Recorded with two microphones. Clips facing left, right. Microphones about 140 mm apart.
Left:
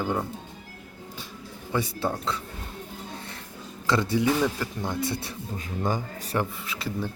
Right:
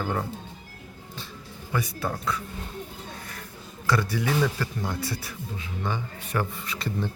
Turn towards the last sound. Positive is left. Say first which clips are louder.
# right 1 dB
turn(degrees=5)  # may be behind; listen again after turning